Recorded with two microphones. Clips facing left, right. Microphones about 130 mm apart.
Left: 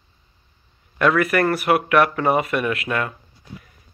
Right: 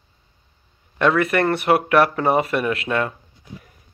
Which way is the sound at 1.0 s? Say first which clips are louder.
Even; 25° right (ahead or behind).